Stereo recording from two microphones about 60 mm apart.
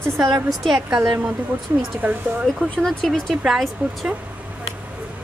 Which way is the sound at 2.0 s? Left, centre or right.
Right.